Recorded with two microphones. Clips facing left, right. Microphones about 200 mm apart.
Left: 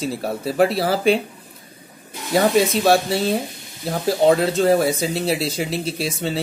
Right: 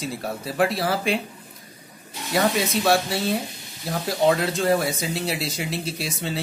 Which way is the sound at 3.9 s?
35° left (ahead or behind).